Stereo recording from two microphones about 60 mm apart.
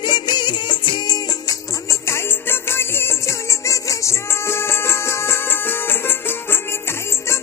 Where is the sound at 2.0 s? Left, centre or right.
Left.